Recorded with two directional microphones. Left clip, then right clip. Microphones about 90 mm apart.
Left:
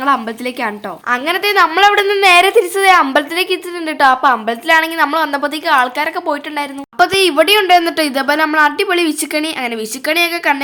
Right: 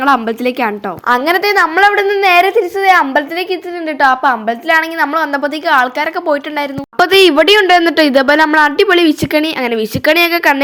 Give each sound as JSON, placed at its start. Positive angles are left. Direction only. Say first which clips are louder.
{"t": 0.0, "sound": "speech", "louder": "right 4 dB", "side_deg": -35}
{"t": 1.0, "sound": "a woman's voice", "louder": "right 4 dB", "side_deg": -60}
{"t": 1.4, "sound": "speech", "louder": "right 1 dB", "side_deg": -35}
{"t": 1.8, "sound": "a woman's voice", "louder": "even", "side_deg": -5}
{"t": 2.5, "sound": "a woman's voice", "louder": "even", "side_deg": 10}
{"t": 4.0, "sound": "a woman's voice", "louder": "even", "side_deg": -5}
{"t": 5.6, "sound": "a woman's voice", "louder": "right 1 dB", "side_deg": -20}
{"t": 6.6, "sound": "a woman's voice", "louder": "right 1 dB", "side_deg": -50}